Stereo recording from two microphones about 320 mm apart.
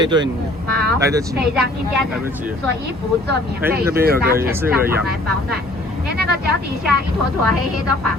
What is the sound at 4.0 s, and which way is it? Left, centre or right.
Speech, right.